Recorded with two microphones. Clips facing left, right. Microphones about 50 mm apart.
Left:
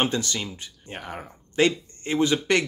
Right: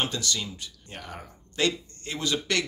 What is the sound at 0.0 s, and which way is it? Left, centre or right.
A man's voice, left.